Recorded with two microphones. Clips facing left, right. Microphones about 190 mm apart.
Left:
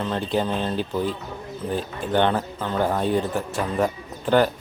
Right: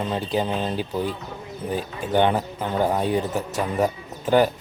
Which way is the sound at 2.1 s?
10° right (ahead or behind).